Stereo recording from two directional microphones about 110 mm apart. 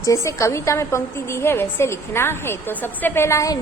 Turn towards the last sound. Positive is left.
turn(degrees=25)  # may be behind; listen again after turning